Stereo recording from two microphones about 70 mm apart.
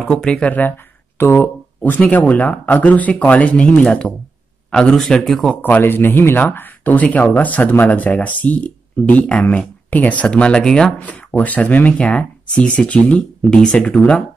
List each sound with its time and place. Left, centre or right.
0.0 s speech: centre; by 1.5 s left
2.0 s speech: left
5.6 s speech: left; by 11.0 s centre
11.0 s speech: left